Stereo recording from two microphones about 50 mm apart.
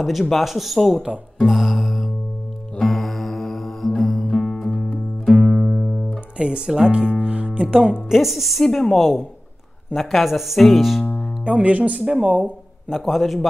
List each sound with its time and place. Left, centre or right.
0.0 s speech: centre
1.4 s music: centre
6.3 s speech: centre
8.1 s speech: centre
11.4 s speech: right
12.8 s speech: centre